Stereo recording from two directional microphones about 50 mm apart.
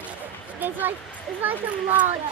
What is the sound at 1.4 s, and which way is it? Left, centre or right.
Speech, right.